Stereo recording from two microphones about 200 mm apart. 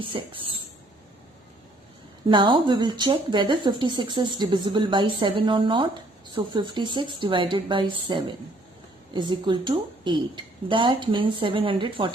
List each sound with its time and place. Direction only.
0.1 s speech: 25° right (ahead or behind)
2.2 s speech: 25° right (ahead or behind)